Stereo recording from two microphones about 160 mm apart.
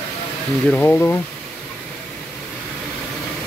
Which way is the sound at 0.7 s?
10° left (ahead or behind).